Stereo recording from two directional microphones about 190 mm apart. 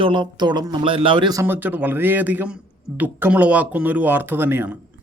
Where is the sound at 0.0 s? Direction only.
25° right (ahead or behind).